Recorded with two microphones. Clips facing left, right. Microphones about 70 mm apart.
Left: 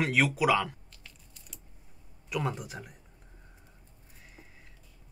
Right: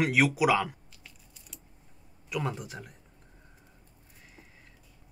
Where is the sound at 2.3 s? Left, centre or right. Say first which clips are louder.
Even; centre.